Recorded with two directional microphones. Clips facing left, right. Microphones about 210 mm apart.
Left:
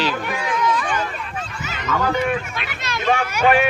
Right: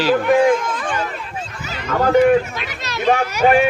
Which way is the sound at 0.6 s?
50° right (ahead or behind).